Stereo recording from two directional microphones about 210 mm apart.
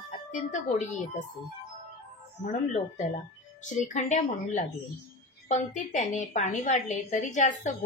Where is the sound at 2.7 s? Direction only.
35° left (ahead or behind).